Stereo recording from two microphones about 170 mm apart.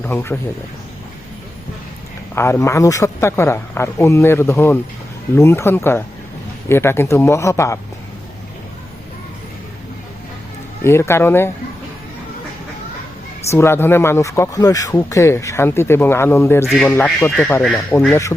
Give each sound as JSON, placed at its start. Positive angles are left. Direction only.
{"t": 0.0, "sound": "speech", "side_deg": 10}
{"t": 2.3, "sound": "speech", "side_deg": 15}
{"t": 10.8, "sound": "speech", "side_deg": 15}
{"t": 13.5, "sound": "speech", "side_deg": 15}